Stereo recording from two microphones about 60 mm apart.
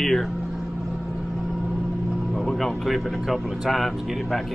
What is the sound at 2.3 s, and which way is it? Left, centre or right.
Speech, centre.